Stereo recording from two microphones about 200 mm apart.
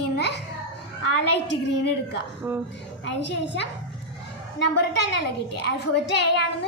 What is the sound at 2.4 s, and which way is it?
Speech, 15° right (ahead or behind).